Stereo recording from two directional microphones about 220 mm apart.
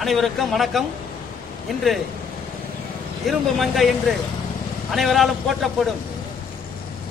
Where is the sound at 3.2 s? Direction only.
Centre (ahead or behind).